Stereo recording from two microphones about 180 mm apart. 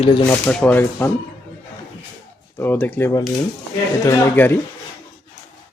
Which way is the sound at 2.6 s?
10° left (ahead or behind).